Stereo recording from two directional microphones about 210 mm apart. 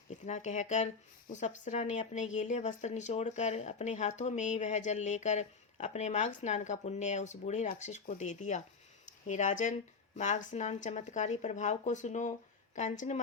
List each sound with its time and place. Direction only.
0.3 s speech: 35° left (ahead or behind)